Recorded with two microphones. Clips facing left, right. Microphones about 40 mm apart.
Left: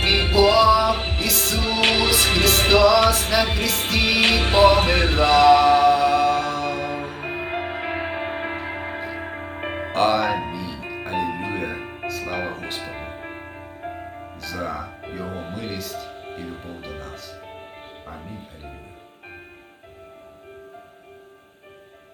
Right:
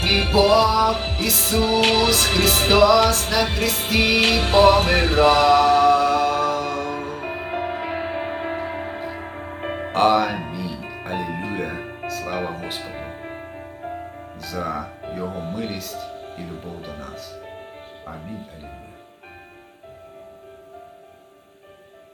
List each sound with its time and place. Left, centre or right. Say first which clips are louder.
0.4 s music: left 2 dB; centre
1.2 s music: right 2 dB; centre
1.8 s music: right 1 dB; centre
2.9 s music: even; centre
4.2 s music: left 1 dB; left
9.9 s music: right 2 dB; centre
14.4 s speech: right 2 dB; centre
15.3 s music: right 2 dB; left
15.5 s music: right 2 dB; centre
16.5 s music: right 1 dB; left
17.4 s music: right 1 dB; centre